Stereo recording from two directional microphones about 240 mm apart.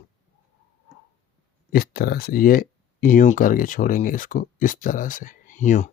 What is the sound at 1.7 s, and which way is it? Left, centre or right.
Speech, left.